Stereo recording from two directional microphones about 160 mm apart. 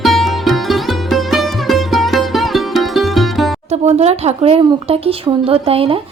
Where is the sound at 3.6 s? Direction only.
45° right (ahead or behind).